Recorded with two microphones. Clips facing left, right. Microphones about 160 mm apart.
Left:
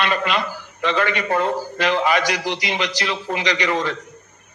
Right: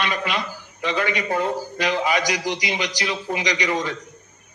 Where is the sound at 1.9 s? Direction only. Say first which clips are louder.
Left 3 dB; 65° left (ahead or behind).